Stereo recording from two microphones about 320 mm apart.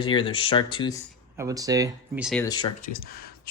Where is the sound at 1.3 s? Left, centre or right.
Centre.